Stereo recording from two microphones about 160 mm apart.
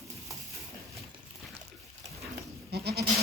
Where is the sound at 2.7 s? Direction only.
80° right.